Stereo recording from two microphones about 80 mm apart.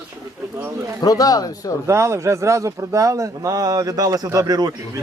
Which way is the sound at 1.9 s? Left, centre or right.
Right.